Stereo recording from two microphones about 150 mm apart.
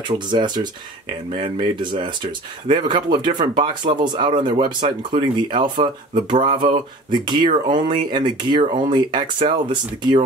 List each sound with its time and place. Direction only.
0.1 s speech: 30° right (ahead or behind)